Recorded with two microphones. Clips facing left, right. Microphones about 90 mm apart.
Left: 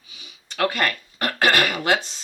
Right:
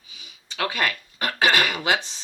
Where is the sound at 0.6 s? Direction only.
55° left (ahead or behind).